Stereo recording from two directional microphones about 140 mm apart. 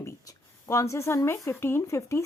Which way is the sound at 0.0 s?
20° left (ahead or behind).